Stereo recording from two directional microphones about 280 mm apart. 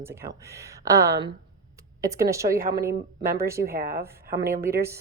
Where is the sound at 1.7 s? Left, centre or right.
Centre.